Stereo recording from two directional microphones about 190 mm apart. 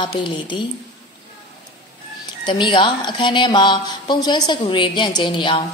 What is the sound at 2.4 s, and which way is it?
A woman's voice, 25° left (ahead or behind).